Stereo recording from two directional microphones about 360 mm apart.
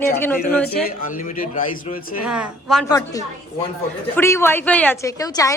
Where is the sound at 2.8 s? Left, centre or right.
Centre.